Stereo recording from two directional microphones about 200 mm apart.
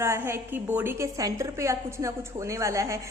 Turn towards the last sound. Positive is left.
turn(degrees=-15)  # may be behind; listen again after turning